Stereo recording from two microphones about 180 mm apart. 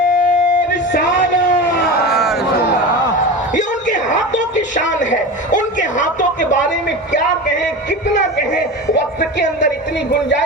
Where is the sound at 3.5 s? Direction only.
45° left (ahead or behind).